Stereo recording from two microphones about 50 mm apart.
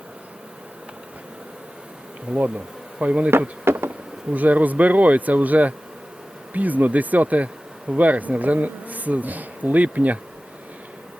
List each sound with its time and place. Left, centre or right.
2.3 s insect: right
3.6 s a sound: right
3.8 s speech: right